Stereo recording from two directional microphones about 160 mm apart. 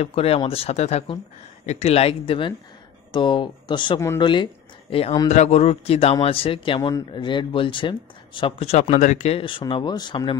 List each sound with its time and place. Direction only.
0.0 s speech: 40° left (ahead or behind)